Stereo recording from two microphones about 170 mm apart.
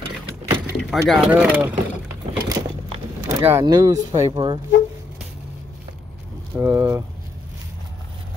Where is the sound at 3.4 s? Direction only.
20° right (ahead or behind).